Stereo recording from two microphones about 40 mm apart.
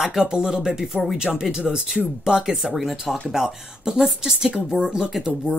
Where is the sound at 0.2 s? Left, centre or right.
Right.